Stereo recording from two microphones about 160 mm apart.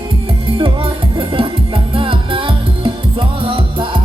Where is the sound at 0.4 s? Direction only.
35° right (ahead or behind).